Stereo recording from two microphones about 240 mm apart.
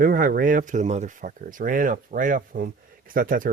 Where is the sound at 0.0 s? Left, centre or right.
Right.